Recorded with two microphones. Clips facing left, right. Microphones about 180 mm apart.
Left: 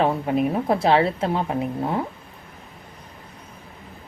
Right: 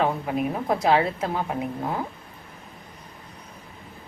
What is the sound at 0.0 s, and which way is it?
A woman's voice, 25° left (ahead or behind).